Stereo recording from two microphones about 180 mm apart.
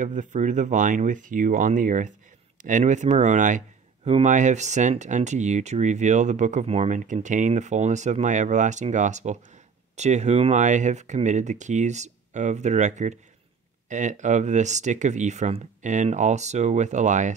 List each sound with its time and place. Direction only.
0.0 s speech: 45° right (ahead or behind)